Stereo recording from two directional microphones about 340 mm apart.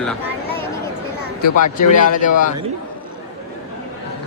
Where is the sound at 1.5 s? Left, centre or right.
Left.